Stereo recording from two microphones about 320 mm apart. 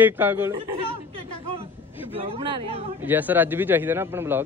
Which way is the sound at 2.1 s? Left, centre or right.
Centre.